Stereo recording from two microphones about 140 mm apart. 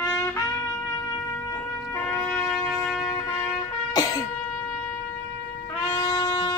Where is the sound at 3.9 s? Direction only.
25° left (ahead or behind).